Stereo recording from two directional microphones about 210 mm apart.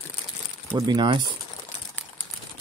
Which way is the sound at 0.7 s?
20° right (ahead or behind).